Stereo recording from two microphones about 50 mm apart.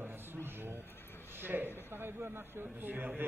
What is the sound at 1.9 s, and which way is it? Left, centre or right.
A man's voice, right.